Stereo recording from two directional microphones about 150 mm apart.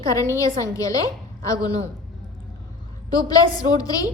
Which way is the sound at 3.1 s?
25° left (ahead or behind).